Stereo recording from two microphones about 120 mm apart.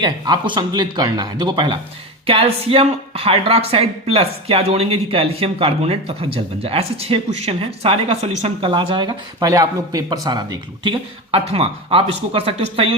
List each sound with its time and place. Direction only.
0.0 s speech: 40° right (ahead or behind)
2.2 s speech: 50° right (ahead or behind); by 8.5 s 70° right (ahead or behind)
8.6 s speech: 45° right (ahead or behind)